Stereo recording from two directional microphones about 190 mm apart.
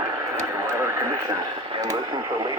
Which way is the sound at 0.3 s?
15° right (ahead or behind).